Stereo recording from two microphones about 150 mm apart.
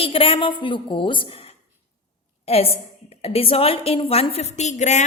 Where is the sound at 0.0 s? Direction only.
40° left (ahead or behind).